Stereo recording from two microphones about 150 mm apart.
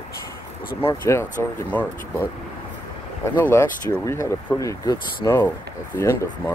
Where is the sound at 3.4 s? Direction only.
15° left (ahead or behind).